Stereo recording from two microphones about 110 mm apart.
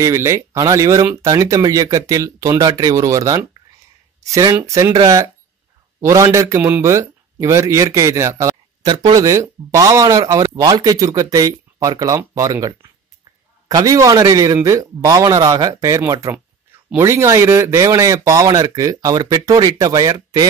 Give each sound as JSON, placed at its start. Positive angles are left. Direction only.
{"t": 0.0, "sound": "a man's voice", "side_deg": -25}
{"t": 8.8, "sound": "speech", "side_deg": -40}